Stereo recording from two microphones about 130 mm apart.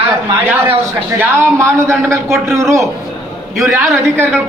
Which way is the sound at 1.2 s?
20° right (ahead or behind).